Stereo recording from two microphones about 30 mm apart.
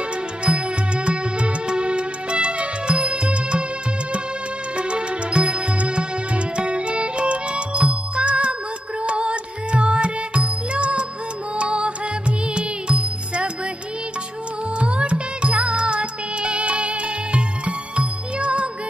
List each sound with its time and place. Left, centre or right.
0.4 s music: right
4.7 s music: right
14.8 s music: right